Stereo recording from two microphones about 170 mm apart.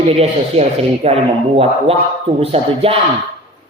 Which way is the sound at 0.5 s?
35° right (ahead or behind).